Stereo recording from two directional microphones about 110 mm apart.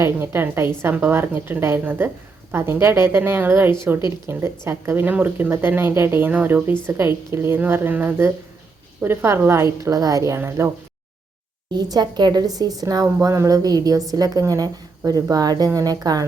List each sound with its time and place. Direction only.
0.0 s speech: 20° right (ahead or behind)
11.8 s a woman's voice: 40° right (ahead or behind)